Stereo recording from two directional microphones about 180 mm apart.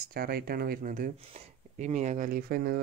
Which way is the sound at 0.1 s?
55° right (ahead or behind).